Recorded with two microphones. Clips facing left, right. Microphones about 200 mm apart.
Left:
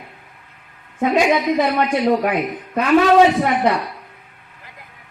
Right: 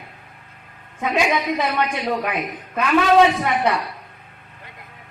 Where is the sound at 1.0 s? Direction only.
40° left (ahead or behind).